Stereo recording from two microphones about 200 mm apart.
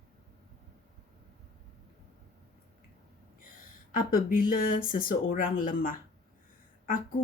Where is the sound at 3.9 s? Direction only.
45° left (ahead or behind).